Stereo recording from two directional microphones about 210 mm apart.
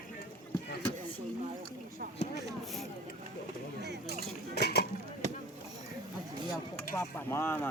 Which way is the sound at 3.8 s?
50° right (ahead or behind).